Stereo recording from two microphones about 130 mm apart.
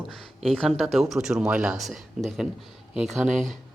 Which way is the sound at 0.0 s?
Centre (ahead or behind).